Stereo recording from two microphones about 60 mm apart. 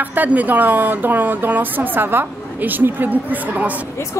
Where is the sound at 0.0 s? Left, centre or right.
Right.